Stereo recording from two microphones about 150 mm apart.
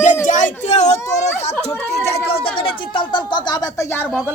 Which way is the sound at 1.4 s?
45° left (ahead or behind).